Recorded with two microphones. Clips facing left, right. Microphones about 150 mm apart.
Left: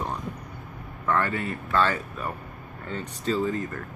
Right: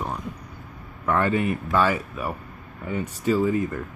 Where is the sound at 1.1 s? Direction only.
15° right (ahead or behind).